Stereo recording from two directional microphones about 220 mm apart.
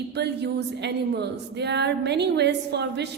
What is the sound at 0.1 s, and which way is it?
A woman's voice, 50° right (ahead or behind).